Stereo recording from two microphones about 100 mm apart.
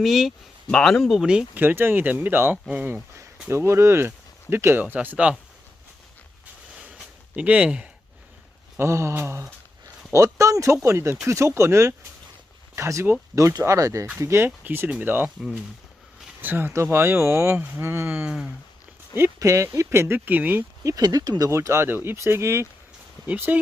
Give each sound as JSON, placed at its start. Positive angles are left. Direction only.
{"t": 0.0, "sound": "speech", "side_deg": 0}
{"t": 1.6, "sound": "speech", "side_deg": -20}
{"t": 6.7, "sound": "a sound", "side_deg": -10}
{"t": 8.8, "sound": "speech", "side_deg": -30}
{"t": 16.4, "sound": "speech", "side_deg": -20}
{"t": 19.1, "sound": "speech", "side_deg": -30}
{"t": 20.8, "sound": "speech", "side_deg": -35}